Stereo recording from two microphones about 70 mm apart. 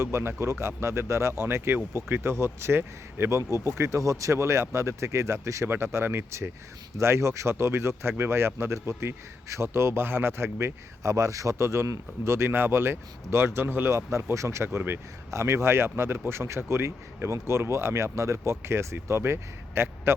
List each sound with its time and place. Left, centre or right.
0.0 s speech: right